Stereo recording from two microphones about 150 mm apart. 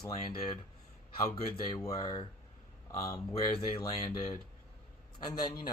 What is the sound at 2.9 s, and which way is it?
Speech, 20° left (ahead or behind).